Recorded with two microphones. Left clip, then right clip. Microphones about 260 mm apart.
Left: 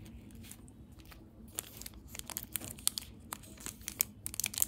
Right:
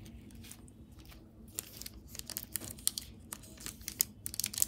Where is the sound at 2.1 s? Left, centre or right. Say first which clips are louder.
Left 1 dB; left.